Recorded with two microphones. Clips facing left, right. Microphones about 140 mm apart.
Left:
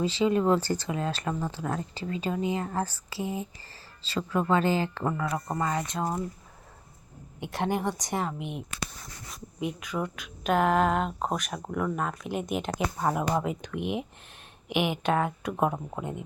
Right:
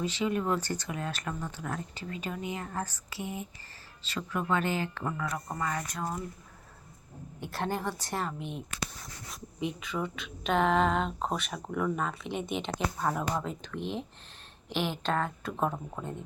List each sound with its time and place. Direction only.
0.0 s speech: 30° left (ahead or behind)
7.5 s speech: 15° left (ahead or behind)
13.0 s speech: 15° left (ahead or behind)